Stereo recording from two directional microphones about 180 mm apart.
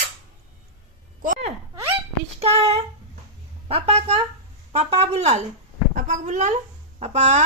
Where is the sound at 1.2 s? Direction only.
40° right (ahead or behind).